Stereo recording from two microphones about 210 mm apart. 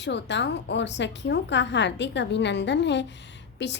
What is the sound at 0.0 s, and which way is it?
A woman's voice, 55° left (ahead or behind).